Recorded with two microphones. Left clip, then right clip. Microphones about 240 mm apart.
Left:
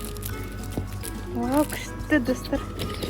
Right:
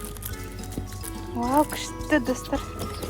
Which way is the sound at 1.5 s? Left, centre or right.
Centre.